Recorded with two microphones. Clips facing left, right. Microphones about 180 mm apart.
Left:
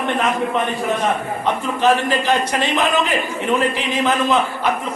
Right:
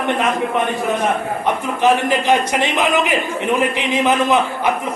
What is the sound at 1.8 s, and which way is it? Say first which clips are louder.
A man's voice: right 1 dB; 15° right (ahead or behind).